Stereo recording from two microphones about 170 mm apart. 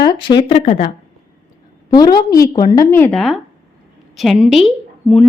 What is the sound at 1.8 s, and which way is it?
A woman's voice, 25° left (ahead or behind).